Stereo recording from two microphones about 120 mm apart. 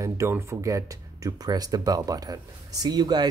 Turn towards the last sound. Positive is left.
turn(degrees=-35)  # may be behind; listen again after turning